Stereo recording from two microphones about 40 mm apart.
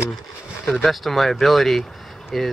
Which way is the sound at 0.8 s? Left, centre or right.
Centre.